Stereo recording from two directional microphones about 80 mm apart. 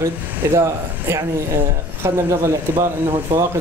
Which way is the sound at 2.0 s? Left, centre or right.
Right.